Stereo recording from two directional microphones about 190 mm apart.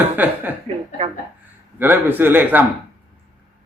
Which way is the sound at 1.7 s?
10° right (ahead or behind).